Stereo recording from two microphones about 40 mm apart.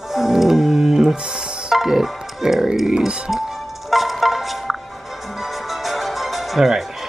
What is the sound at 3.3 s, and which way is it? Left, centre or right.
Music, centre.